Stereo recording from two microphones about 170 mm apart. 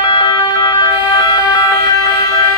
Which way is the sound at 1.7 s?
65° right (ahead or behind).